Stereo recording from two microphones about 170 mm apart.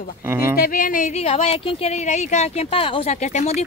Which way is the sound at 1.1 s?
40° left (ahead or behind).